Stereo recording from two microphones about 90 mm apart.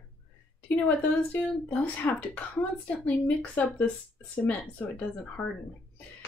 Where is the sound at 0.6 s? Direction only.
20° left (ahead or behind).